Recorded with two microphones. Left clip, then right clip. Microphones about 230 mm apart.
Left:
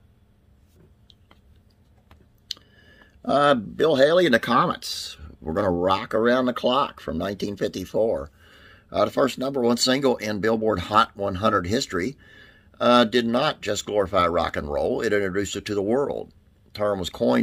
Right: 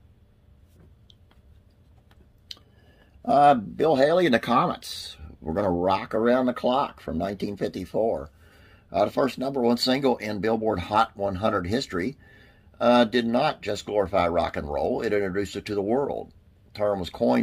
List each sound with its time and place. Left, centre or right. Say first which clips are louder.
3.9 s speech: left 3 dB; left